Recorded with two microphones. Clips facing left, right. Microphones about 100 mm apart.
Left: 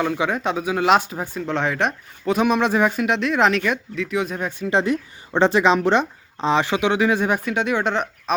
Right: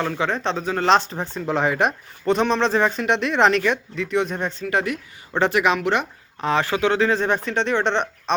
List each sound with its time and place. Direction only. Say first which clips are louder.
0.0 s a woman's voice: left 1 dB; 10° left (ahead or behind)
4.6 s a woman's voice: left 6 dB; 25° left (ahead or behind); by 8.4 s 5° left (ahead or behind)